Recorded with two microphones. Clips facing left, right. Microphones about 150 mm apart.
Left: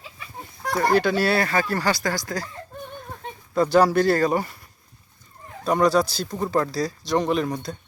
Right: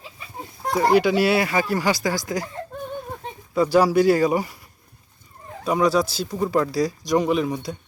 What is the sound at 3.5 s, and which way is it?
Speech, 10° right (ahead or behind).